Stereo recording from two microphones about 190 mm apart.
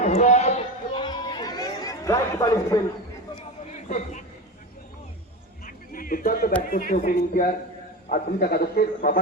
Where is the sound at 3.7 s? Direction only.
35° left (ahead or behind).